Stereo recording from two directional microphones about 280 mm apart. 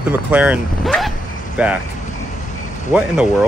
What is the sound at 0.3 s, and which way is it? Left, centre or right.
Speech, centre.